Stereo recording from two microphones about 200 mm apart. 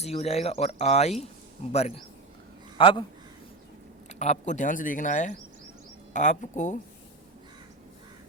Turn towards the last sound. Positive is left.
turn(degrees=40)  # may be behind; listen again after turning